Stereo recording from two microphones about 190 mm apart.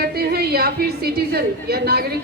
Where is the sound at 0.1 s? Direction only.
55° right (ahead or behind).